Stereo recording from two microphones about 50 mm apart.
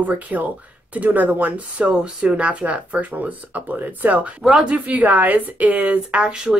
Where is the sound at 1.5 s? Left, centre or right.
Right.